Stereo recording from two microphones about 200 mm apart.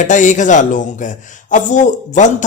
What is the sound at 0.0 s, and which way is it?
A man's voice, 40° left (ahead or behind).